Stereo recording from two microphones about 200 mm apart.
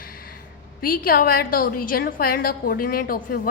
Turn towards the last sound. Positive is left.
turn(degrees=45)  # may be behind; listen again after turning